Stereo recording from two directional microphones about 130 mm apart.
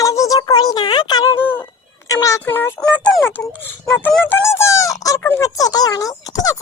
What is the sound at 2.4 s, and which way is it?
Speech, 15° left (ahead or behind).